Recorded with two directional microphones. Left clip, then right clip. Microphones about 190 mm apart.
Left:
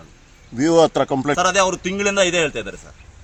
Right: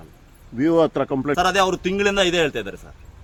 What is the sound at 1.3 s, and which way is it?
A man's voice, 20° right (ahead or behind).